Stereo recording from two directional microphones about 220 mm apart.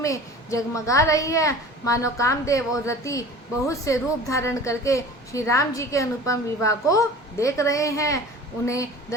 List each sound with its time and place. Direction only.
0.0 s a woman's voice: 15° left (ahead or behind)